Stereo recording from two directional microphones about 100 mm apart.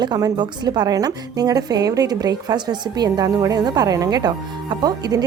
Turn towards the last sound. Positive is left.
turn(degrees=-40)  # may be behind; listen again after turning